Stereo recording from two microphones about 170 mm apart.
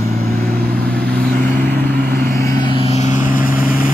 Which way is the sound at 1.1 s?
10° left (ahead or behind).